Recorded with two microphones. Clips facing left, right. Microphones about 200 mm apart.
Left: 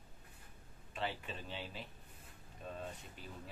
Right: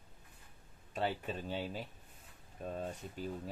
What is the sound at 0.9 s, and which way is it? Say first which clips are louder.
Speech: right 5 dB; 45° right (ahead or behind).